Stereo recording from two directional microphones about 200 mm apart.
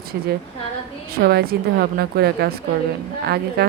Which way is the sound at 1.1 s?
50° right (ahead or behind).